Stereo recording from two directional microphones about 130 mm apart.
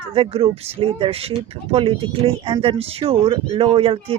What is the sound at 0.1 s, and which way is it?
Speech, 45° right (ahead or behind).